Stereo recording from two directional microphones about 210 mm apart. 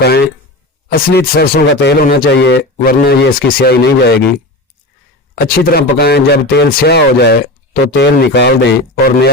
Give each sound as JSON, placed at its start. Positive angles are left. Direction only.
{"t": 0.9, "sound": "a man's voice", "side_deg": 45}
{"t": 5.3, "sound": "a man's voice", "side_deg": 45}